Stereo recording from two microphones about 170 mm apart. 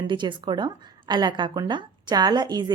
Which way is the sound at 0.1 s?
25° right (ahead or behind).